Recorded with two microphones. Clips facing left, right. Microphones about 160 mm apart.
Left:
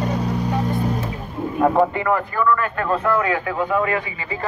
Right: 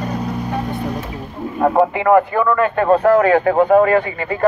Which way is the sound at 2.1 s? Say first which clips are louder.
Right 9 dB; 55° right (ahead or behind).